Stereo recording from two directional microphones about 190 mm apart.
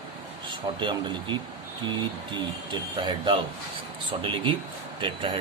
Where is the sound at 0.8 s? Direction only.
25° right (ahead or behind).